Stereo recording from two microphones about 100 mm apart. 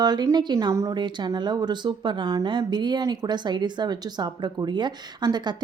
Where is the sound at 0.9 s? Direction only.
50° right (ahead or behind).